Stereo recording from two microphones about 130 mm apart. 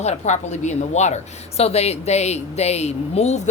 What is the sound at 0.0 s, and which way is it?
Speech, 65° left (ahead or behind).